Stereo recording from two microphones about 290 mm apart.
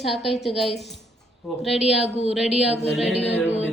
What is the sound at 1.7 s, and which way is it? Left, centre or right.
Speech, left.